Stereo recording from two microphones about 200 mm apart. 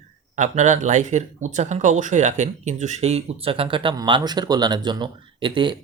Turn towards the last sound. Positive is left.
turn(degrees=-25)  # may be behind; listen again after turning